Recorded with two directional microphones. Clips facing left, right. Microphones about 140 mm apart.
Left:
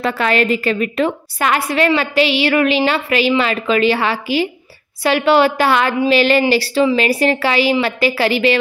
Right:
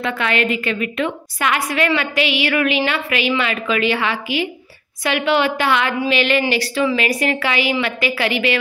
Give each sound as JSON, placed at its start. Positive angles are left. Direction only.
{"t": 0.0, "sound": "a woman's voice", "side_deg": 40}